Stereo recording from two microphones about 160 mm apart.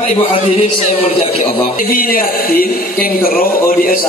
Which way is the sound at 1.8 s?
65° left (ahead or behind).